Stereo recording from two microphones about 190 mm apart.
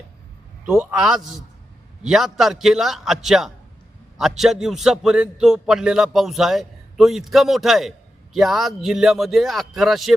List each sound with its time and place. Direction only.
0.6 s a man's voice: 5° right (ahead or behind)